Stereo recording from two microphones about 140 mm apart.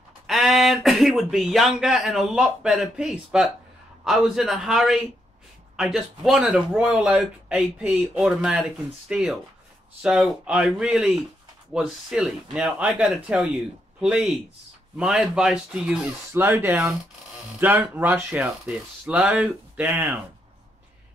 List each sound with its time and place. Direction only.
0.3 s speech: centre (ahead or behind)